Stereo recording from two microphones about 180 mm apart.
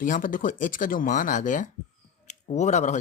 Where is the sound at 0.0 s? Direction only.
50° left (ahead or behind).